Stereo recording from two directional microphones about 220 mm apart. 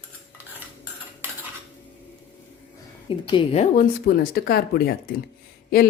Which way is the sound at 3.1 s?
25° left (ahead or behind).